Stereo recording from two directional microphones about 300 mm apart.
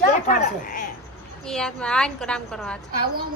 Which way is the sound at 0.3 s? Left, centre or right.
Left.